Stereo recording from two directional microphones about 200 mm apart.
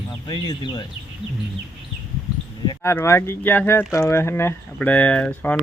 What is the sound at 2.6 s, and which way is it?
Speech, 15° left (ahead or behind).